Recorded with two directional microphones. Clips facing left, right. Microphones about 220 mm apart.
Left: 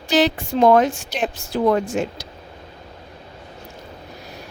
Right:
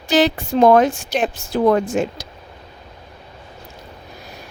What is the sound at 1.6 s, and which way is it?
Speech, 65° right (ahead or behind).